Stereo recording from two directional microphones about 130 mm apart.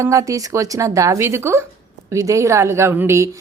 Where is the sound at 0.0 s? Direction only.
25° right (ahead or behind).